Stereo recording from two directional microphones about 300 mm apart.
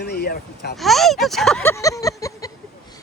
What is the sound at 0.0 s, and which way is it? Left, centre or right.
Speech, left.